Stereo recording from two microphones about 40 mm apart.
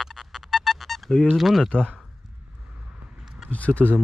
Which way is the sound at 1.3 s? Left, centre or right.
Centre.